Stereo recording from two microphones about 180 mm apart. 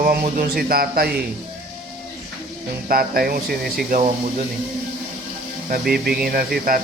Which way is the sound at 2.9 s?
55° right (ahead or behind).